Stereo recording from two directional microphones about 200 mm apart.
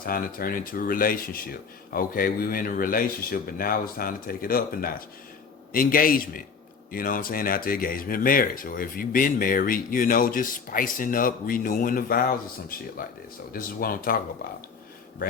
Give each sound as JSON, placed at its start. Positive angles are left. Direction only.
{"t": 0.0, "sound": "speech", "side_deg": 45}
{"t": 13.5, "sound": "speech", "side_deg": 45}